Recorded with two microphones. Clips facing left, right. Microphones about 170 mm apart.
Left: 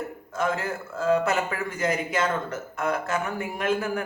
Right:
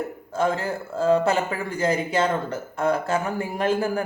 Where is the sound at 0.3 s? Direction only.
30° right (ahead or behind).